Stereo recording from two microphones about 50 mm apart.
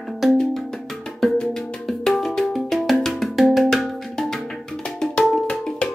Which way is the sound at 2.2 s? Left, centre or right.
Centre.